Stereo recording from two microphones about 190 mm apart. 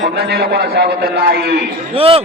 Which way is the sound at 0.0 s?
55° right (ahead or behind).